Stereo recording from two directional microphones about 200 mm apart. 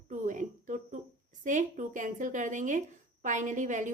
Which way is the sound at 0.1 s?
40° right (ahead or behind).